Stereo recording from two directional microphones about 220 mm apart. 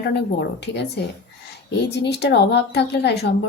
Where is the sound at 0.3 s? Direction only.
50° left (ahead or behind).